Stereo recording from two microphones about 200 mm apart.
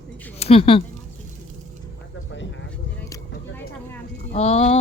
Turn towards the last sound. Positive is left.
turn(degrees=30)  # may be behind; listen again after turning